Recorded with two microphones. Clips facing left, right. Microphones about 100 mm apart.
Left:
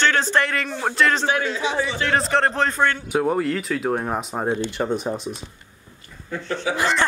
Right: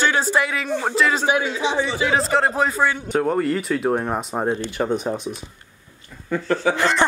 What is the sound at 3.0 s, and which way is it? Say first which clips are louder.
Speech: right 1 dB; 5° left (ahead or behind).